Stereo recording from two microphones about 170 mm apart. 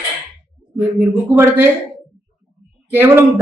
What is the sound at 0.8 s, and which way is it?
Speech, 10° right (ahead or behind).